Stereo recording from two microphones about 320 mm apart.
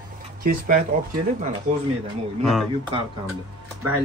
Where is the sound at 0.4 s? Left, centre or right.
Right.